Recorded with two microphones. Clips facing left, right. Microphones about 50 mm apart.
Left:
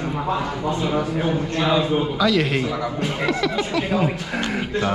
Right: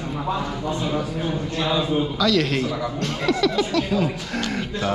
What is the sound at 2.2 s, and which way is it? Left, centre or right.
A man's voice, centre.